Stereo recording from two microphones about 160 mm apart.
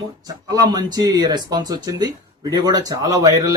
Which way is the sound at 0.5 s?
25° right (ahead or behind).